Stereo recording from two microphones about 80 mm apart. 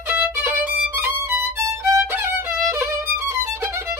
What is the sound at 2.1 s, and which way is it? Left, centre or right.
Music, right.